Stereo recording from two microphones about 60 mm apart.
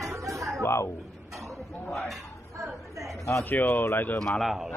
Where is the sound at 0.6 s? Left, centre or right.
Left.